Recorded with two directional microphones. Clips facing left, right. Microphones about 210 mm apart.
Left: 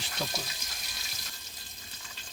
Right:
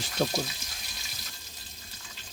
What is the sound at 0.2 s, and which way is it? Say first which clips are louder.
Speech: right 8 dB; 50° right (ahead or behind).